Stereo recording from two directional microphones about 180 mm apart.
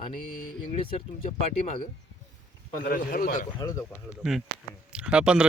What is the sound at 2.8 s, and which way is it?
Speech, 55° left (ahead or behind).